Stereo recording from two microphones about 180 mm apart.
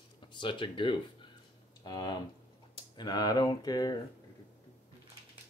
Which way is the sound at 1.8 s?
25° left (ahead or behind).